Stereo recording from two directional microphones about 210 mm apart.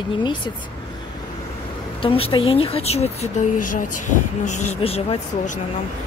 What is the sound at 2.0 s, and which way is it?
Speech, 25° left (ahead or behind).